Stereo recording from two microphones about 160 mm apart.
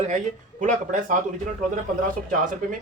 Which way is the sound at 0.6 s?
55° right (ahead or behind).